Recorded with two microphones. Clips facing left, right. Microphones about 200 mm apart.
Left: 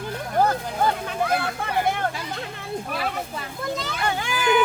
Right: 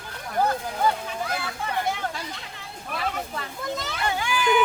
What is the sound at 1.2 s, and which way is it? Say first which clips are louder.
Speech: left 6 dB; 60° left (ahead or behind).